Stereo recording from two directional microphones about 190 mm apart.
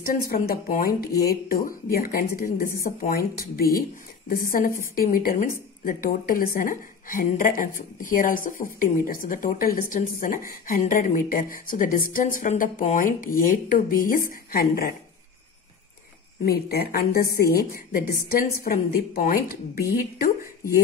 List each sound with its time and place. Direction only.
0.0 s speech: 50° left (ahead or behind)
16.4 s speech: 55° left (ahead or behind)